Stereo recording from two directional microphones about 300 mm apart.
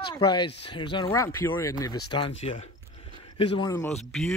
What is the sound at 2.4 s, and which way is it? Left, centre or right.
Speech, left.